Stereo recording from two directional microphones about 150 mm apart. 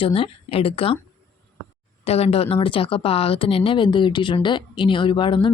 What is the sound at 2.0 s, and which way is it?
Speech, 45° left (ahead or behind).